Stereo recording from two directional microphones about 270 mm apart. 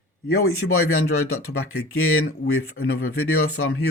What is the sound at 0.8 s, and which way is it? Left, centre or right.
Speech, left.